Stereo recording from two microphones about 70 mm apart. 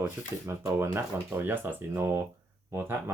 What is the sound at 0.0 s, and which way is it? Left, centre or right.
Speech, right.